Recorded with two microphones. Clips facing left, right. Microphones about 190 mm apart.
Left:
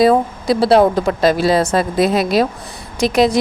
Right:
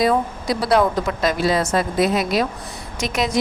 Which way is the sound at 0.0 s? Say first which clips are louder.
Left 6 dB; 30° left (ahead or behind).